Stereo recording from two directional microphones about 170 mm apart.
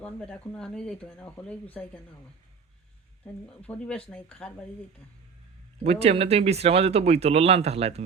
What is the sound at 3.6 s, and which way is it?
Speech, 5° left (ahead or behind).